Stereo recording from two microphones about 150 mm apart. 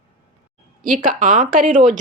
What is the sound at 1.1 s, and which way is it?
Speech, 60° right (ahead or behind).